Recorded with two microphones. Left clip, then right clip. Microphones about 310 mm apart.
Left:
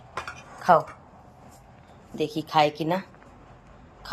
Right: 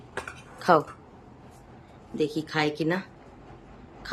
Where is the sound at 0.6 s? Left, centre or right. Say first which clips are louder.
Left 2 dB; centre.